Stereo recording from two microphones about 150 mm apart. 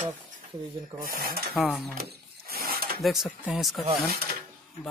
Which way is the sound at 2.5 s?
90° right.